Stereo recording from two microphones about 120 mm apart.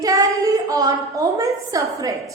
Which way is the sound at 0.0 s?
30° right (ahead or behind).